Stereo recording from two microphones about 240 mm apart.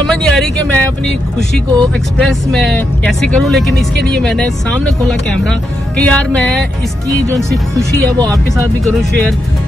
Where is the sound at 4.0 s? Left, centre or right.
Right.